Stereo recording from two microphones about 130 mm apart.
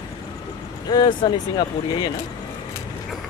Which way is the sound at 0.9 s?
35° left (ahead or behind).